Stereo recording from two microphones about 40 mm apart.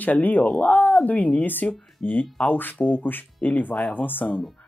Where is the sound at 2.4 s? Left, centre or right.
Left.